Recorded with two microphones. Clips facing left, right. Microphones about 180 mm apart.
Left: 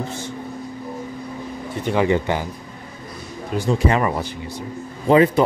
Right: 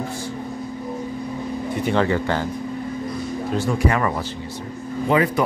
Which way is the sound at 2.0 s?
20° left (ahead or behind).